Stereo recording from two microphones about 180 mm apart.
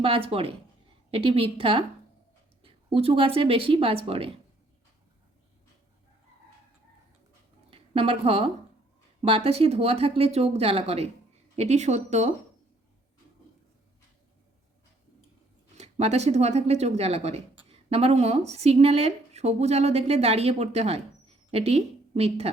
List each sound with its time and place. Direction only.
0.0 s a woman's voice: 30° right (ahead or behind)
7.7 s a woman's voice: 30° right (ahead or behind)
15.8 s a woman's voice: 35° right (ahead or behind)